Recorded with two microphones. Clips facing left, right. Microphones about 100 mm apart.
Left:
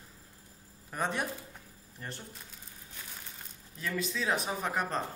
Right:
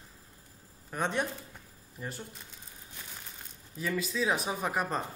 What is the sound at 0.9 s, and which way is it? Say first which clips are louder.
Speech: right 2 dB; centre (ahead or behind).